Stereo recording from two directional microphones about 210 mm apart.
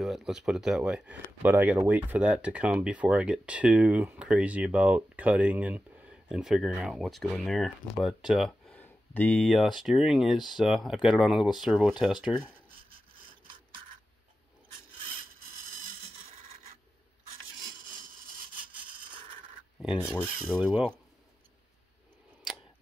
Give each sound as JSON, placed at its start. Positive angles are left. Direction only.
{"t": 0.0, "sound": "speech", "side_deg": 0}
{"t": 18.7, "sound": "a sound", "side_deg": -25}
{"t": 20.0, "sound": "speech", "side_deg": 10}